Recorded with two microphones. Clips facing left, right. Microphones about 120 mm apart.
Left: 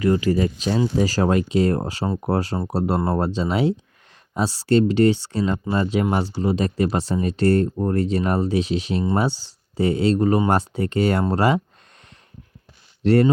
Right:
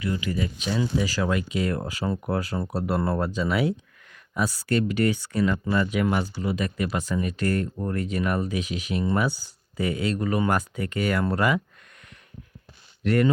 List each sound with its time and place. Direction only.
0.0 s speech: 40° left (ahead or behind)
13.0 s speech: 30° left (ahead or behind)